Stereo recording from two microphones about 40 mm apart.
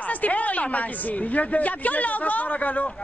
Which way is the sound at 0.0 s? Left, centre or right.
Left.